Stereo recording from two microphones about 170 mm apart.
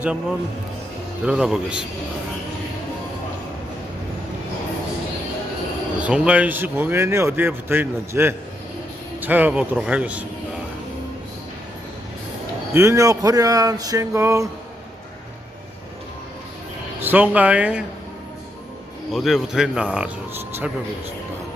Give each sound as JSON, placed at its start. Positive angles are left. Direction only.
{"t": 0.0, "sound": "a man's voice", "side_deg": -5}
{"t": 6.0, "sound": "speech", "side_deg": -5}
{"t": 12.7, "sound": "speech", "side_deg": -15}
{"t": 17.0, "sound": "speech", "side_deg": -10}
{"t": 19.1, "sound": "a man's voice", "side_deg": 0}